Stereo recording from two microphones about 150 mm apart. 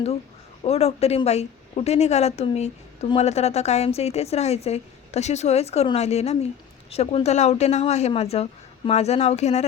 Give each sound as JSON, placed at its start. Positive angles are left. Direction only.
{"t": 0.6, "sound": "a woman's voice", "side_deg": 40}